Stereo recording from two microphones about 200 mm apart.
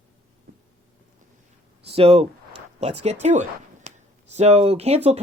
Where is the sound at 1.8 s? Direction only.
30° right (ahead or behind).